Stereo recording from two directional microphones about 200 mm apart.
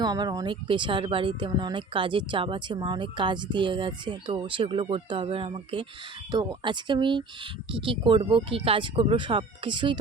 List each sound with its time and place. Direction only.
0.0 s speech: 20° right (ahead or behind)